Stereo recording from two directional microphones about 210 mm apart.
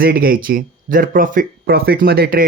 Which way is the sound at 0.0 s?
45° right (ahead or behind).